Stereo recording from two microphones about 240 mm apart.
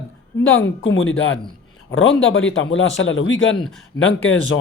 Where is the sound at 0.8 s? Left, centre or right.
Left.